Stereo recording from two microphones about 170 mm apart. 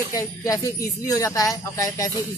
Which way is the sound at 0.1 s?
20° left (ahead or behind).